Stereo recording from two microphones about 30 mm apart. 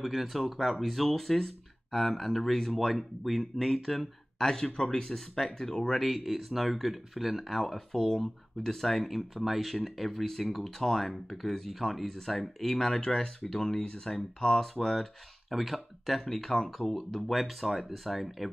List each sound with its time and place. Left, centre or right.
0.0 s speech: centre
4.4 s speech: centre
5.9 s speech: centre
7.4 s speech: centre
11.6 s speech: centre
12.7 s speech: centre
14.6 s speech: centre
15.5 s speech: centre
16.2 s speech: centre